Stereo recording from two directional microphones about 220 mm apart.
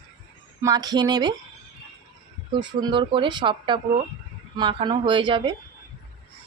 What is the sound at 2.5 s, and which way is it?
Speech, 20° right (ahead or behind).